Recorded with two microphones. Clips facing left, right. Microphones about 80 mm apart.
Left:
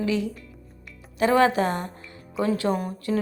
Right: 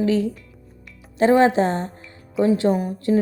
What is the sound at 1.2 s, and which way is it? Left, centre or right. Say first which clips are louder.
A woman's voice: right 4 dB; right.